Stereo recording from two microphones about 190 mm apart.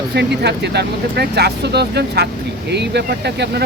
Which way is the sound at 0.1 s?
60° right (ahead or behind).